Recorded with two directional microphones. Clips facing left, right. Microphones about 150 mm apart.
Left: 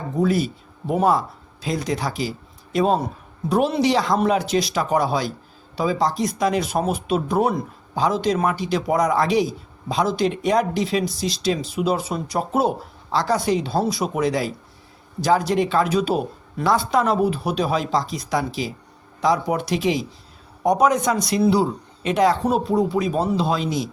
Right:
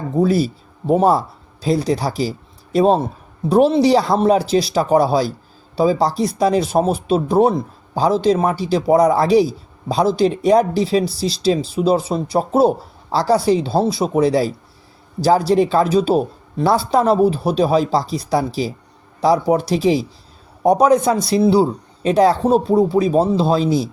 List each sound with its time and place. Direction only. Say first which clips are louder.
0.2 s speech: right 4 dB; 35° right (ahead or behind)